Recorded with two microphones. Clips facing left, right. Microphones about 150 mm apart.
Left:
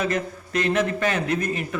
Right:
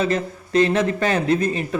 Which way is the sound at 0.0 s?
30° right (ahead or behind).